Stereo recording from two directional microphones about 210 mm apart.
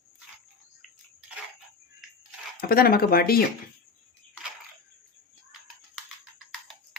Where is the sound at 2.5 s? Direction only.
45° left (ahead or behind).